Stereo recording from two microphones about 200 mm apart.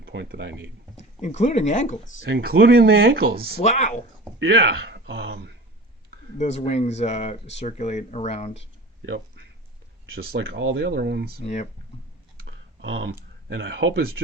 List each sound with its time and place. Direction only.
0.0 s speech: 55° right (ahead or behind)
0.9 s speech: 35° left (ahead or behind)
2.2 s speech: 55° right (ahead or behind)
3.6 s speech: 35° left (ahead or behind)
4.4 s speech: 70° right (ahead or behind)
6.4 s speech: 35° left (ahead or behind)
9.0 s speech: 70° right (ahead or behind)
11.4 s speech: 35° left (ahead or behind)
12.5 s typing: 65° right (ahead or behind)
13.5 s speech: 70° right (ahead or behind)